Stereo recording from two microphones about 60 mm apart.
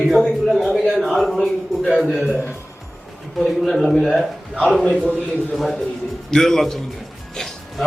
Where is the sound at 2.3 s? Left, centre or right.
Centre.